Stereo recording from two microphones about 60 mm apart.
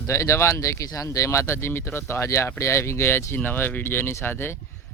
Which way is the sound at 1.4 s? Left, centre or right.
Left.